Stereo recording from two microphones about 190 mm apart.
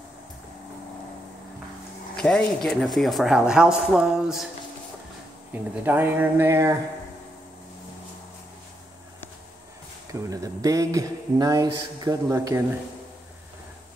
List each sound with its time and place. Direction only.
2.1 s speech: 5° left (ahead or behind)
5.5 s speech: 10° right (ahead or behind)
10.1 s speech: 20° right (ahead or behind)